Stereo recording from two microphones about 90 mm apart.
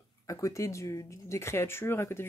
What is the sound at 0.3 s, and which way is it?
Speech, 35° left (ahead or behind).